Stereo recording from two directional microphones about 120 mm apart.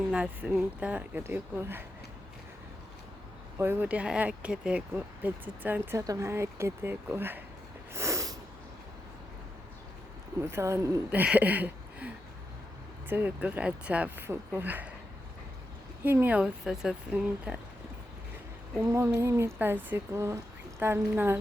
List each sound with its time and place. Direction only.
0.1 s speech: 10° right (ahead or behind)
3.6 s speech: 15° right (ahead or behind)
7.9 s snort: 25° right (ahead or behind)
10.4 s speech: 20° right (ahead or behind)
11.1 s a sound: 15° right (ahead or behind)
13.1 s speech: 15° right (ahead or behind)
16.0 s speech: 15° right (ahead or behind)
18.8 s speech: 20° right (ahead or behind)